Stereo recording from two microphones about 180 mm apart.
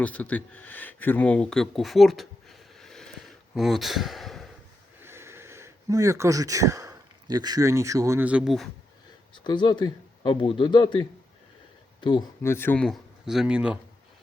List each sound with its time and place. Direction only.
0.0 s speech: 10° left (ahead or behind)
5.0 s speech: 15° right (ahead or behind)
9.3 s speech: 25° left (ahead or behind)
12.4 s speech: 15° left (ahead or behind); by 13.7 s 5° right (ahead or behind)